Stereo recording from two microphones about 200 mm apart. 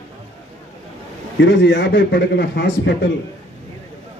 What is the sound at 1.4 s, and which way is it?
A man's voice, 60° left (ahead or behind).